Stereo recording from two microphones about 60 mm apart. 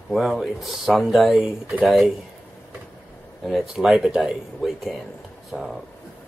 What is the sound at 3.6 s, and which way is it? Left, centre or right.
Speech, centre.